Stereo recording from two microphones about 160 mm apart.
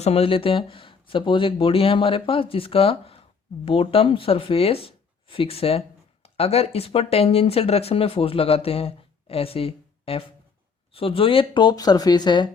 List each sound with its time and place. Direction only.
0.0 s speech: 40° left (ahead or behind)